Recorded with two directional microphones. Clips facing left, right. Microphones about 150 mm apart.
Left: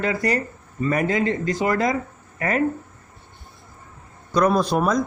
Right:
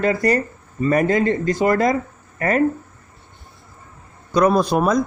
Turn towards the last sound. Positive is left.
turn(degrees=-40)  # may be behind; listen again after turning